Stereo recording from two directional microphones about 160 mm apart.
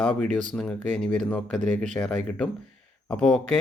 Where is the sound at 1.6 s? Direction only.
50° right (ahead or behind).